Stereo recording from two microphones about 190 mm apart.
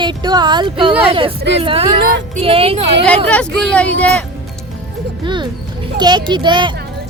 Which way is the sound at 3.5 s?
65° right (ahead or behind).